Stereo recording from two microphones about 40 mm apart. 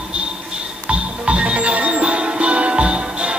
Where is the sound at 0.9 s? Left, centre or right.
Right.